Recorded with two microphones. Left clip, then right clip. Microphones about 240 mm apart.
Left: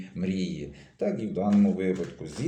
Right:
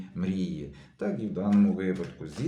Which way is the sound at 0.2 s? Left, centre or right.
Centre.